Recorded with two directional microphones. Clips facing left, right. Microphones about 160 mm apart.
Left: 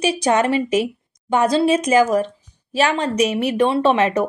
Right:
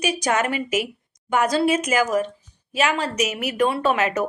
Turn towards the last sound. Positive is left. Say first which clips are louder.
# left 5 dB
turn(degrees=30)  # may be behind; listen again after turning